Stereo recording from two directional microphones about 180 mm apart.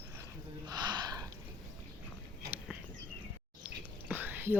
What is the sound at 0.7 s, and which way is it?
Speech, 25° right (ahead or behind).